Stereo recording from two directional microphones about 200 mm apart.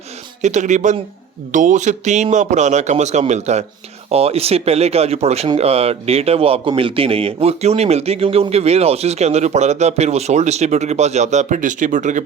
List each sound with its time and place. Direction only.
0.4 s speech: 35° right (ahead or behind)